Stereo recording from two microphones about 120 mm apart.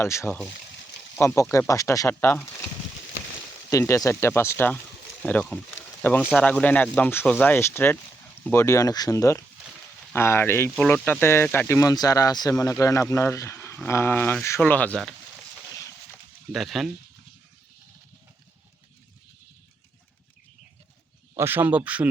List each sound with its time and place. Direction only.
0.0 s speech: 20° left (ahead or behind)
3.7 s speech: 25° left (ahead or behind)
16.5 s speech: centre (ahead or behind)
21.3 s speech: 15° right (ahead or behind)